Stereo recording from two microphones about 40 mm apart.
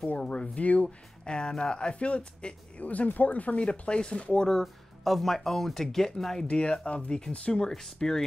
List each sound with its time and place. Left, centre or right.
0.0 s a sound: left
0.8 s speech: left
2.8 s speech: left
5.0 s speech: centre
6.4 s speech: left